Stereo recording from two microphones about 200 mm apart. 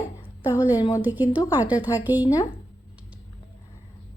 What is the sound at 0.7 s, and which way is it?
Speech, 20° left (ahead or behind).